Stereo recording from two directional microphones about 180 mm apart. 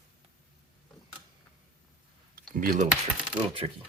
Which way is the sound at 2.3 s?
55° right (ahead or behind).